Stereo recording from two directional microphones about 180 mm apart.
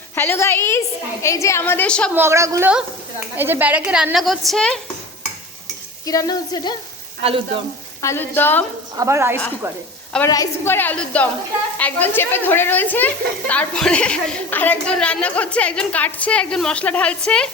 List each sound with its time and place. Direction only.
0.2 s a woman's voice: 15° left (ahead or behind)
2.1 s a woman's voice: 15° right (ahead or behind); by 4.8 s 5° left (ahead or behind)
6.1 s speech: 20° left (ahead or behind)
7.2 s frying: 30° right (ahead or behind)
8.0 s a woman's voice: 10° left (ahead or behind)
9.0 s a woman's voice: 15° right (ahead or behind)
10.2 s a woman's voice: 20° left (ahead or behind)